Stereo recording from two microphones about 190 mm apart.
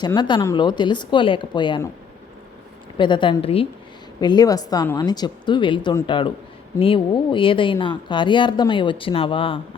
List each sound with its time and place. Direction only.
0.0 s a woman's voice: 25° left (ahead or behind)
3.0 s a woman's voice: 25° left (ahead or behind)